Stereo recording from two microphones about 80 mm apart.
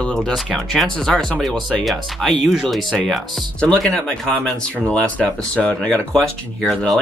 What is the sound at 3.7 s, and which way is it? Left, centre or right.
Speech, centre.